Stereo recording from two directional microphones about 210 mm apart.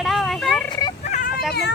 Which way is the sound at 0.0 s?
Centre (ahead or behind).